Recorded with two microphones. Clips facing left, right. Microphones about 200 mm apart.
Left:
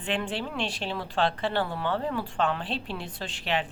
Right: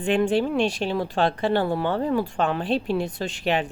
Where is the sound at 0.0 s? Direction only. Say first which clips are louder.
Right 10 dB; 45° right (ahead or behind).